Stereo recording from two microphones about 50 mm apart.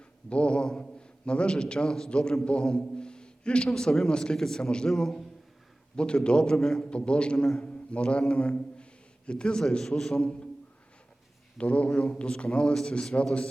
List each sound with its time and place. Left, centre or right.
0.3 s a man's voice: left
6.0 s a man's voice: centre
11.5 s a man's voice: left